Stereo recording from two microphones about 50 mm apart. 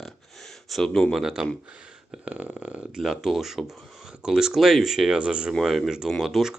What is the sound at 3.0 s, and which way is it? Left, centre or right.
Speech, centre.